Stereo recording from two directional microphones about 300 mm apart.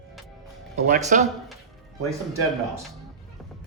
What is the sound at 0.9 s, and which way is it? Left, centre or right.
Speech, right.